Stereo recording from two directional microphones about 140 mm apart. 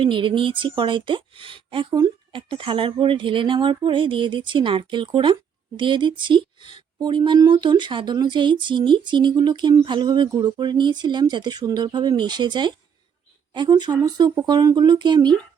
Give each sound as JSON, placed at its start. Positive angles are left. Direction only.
{"t": 0.0, "sound": "speech", "side_deg": -35}